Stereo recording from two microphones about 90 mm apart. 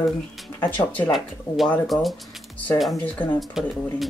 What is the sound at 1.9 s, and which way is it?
Speech, centre (ahead or behind).